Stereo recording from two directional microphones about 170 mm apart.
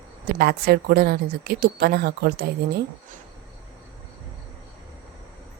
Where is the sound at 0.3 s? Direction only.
65° right (ahead or behind).